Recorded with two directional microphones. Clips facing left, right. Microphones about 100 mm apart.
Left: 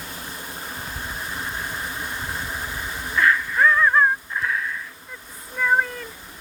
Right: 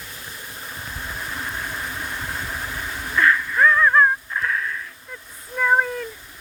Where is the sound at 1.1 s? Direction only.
10° left (ahead or behind).